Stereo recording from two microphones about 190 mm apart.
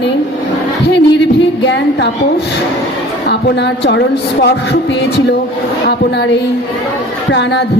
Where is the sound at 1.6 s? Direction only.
65° left (ahead or behind).